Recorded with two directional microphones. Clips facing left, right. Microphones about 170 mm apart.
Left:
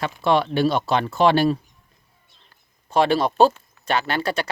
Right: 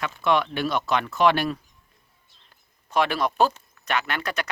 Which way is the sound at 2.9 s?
30° left (ahead or behind).